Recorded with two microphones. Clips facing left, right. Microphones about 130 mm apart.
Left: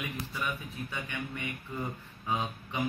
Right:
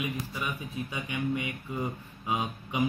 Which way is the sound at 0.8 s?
15° right (ahead or behind).